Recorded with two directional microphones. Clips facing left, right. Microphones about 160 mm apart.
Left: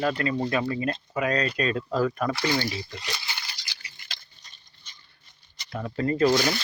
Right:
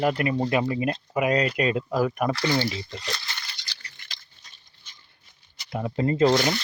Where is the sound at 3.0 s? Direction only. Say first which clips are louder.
Right 1 dB; 10° left (ahead or behind).